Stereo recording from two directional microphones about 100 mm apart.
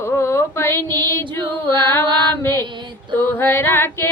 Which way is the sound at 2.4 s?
25° left (ahead or behind).